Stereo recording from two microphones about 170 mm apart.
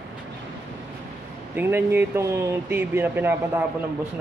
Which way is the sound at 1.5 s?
10° right (ahead or behind).